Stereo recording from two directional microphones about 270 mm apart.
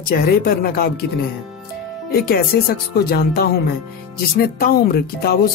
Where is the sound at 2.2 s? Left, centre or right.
Left.